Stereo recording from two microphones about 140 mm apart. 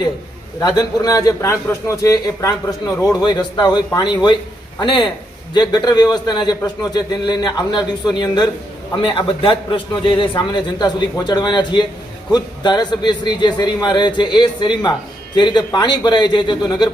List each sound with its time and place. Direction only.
0.6 s a man's voice: 25° left (ahead or behind)